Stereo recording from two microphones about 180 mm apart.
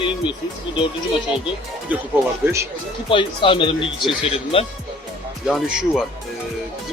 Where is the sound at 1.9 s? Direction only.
10° right (ahead or behind).